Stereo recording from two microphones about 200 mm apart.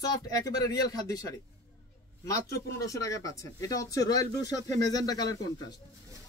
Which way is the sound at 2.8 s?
15° left (ahead or behind).